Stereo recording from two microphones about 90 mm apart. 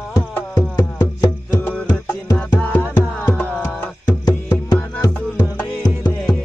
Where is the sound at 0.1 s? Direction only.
40° left (ahead or behind).